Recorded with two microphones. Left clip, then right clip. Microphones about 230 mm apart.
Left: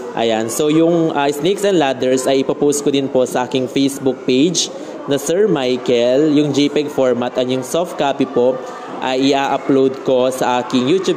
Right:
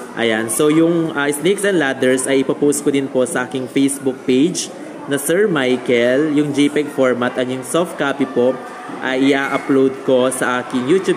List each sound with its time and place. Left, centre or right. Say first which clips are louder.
0.2 s speech: even; centre